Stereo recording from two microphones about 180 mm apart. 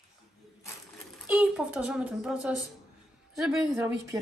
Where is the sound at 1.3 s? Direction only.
5° right (ahead or behind).